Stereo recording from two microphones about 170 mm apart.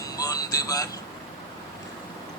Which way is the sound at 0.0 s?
20° left (ahead or behind).